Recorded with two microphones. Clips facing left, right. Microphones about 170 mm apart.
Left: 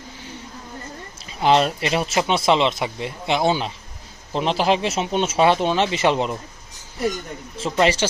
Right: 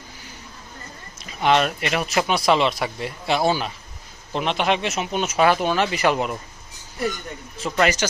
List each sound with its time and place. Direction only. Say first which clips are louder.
1.2 s speech: left 2 dB; 30° left (ahead or behind)
4.4 s speech: left 2 dB; 30° left (ahead or behind)
7.6 s speech: left 2 dB; 30° left (ahead or behind)